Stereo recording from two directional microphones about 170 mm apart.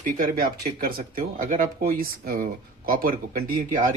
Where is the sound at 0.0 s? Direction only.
55° right (ahead or behind).